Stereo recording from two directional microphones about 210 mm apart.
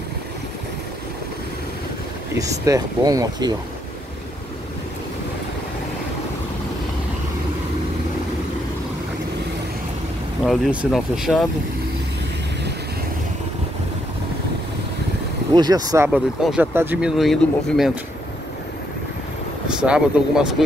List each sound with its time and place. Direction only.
2.3 s speech: 15° right (ahead or behind)
10.4 s speech: centre (ahead or behind)
15.5 s speech: 20° right (ahead or behind)
16.1 s speech: 5° right (ahead or behind)
19.8 s speech: 5° right (ahead or behind)